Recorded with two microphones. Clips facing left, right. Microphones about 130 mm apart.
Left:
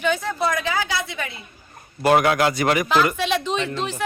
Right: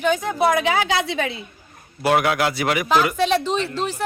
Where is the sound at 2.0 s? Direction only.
Centre (ahead or behind).